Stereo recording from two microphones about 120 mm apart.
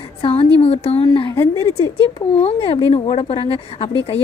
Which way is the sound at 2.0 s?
55° left (ahead or behind).